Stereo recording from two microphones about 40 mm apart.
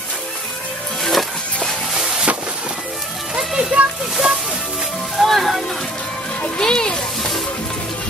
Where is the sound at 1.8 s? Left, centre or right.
Centre.